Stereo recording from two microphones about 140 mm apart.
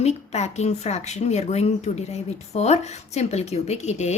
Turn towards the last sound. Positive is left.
turn(degrees=55)  # may be behind; listen again after turning